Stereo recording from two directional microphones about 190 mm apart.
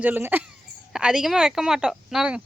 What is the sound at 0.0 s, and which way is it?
Speech, 10° right (ahead or behind).